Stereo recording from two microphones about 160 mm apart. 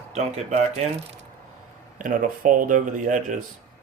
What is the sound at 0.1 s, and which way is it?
Speech, 40° right (ahead or behind).